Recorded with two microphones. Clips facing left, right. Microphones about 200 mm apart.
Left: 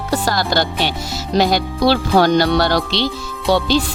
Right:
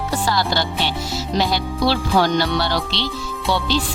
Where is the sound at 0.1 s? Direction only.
45° left (ahead or behind).